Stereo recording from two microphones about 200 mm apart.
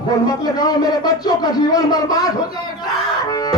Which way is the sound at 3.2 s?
20° left (ahead or behind).